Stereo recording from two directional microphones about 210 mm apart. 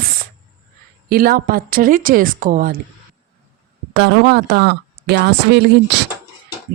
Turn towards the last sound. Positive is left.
turn(degrees=-55)  # may be behind; listen again after turning